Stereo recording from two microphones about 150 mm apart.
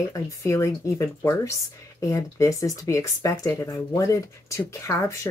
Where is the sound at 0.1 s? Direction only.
20° left (ahead or behind).